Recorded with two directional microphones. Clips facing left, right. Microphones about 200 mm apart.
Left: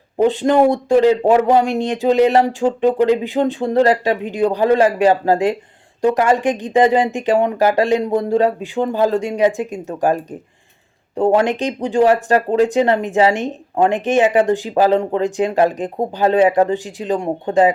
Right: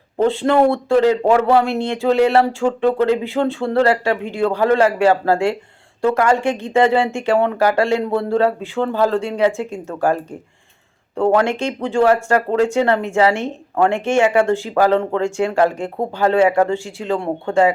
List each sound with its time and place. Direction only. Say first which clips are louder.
0.2 s speech: left 1 dB; 15° left (ahead or behind)